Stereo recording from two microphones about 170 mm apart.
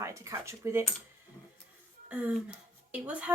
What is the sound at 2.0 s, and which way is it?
Speech, 10° right (ahead or behind).